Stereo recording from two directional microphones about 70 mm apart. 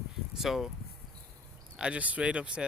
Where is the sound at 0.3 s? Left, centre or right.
Centre.